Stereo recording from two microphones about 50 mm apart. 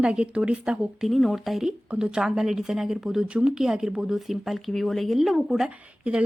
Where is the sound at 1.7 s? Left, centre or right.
Centre.